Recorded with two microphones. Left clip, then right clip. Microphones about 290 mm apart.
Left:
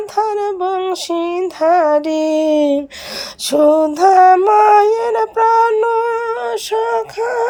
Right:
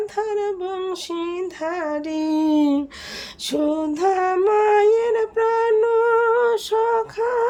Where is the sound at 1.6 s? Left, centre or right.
Centre.